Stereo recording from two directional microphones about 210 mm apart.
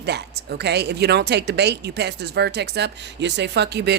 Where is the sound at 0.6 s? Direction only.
50° right (ahead or behind).